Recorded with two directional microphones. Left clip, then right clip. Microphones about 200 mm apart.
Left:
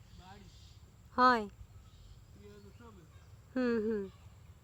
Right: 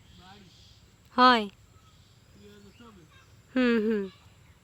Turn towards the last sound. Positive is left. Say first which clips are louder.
# right 7 dB
turn(degrees=-10)  # may be behind; listen again after turning